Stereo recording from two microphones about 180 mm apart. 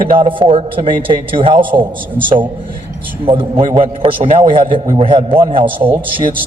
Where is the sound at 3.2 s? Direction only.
30° right (ahead or behind).